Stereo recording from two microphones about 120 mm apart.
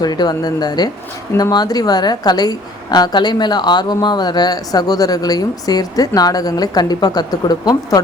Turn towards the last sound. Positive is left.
turn(degrees=35)  # may be behind; listen again after turning